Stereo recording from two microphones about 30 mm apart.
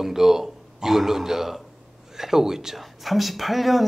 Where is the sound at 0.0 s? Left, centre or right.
Centre.